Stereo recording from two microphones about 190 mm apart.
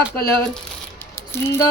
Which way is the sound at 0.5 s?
15° left (ahead or behind).